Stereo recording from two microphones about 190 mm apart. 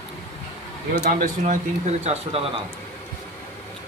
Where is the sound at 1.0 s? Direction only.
45° right (ahead or behind).